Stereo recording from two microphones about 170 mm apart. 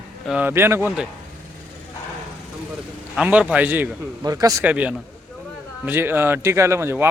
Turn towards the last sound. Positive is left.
turn(degrees=-15)  # may be behind; listen again after turning